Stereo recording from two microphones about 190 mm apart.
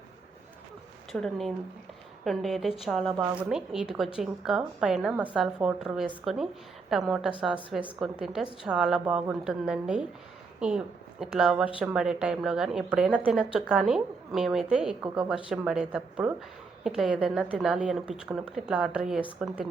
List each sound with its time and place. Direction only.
1.1 s a woman's voice: centre (ahead or behind)